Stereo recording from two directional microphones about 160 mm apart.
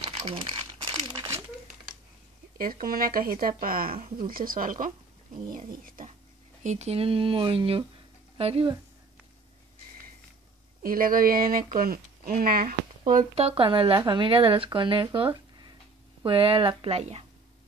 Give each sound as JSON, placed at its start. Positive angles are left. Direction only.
{"t": 0.2, "sound": "speech", "side_deg": -35}
{"t": 0.9, "sound": "crumpling", "side_deg": -25}
{"t": 2.5, "sound": "speech", "side_deg": -65}
{"t": 6.6, "sound": "speech", "side_deg": -45}
{"t": 10.8, "sound": "speech", "side_deg": -60}
{"t": 13.1, "sound": "speech", "side_deg": -45}